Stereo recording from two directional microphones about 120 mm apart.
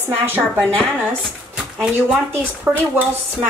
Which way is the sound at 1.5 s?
5° right (ahead or behind).